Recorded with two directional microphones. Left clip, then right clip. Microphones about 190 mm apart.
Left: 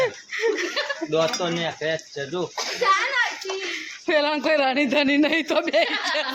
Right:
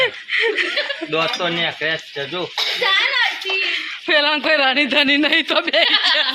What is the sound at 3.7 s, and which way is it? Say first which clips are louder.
Speech: right 1 dB; 10° left (ahead or behind).